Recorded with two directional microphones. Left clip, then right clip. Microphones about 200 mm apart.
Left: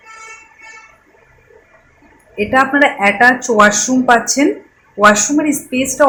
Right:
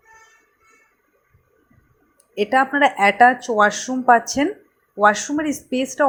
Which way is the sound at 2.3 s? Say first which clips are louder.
Left 5 dB; 40° right (ahead or behind).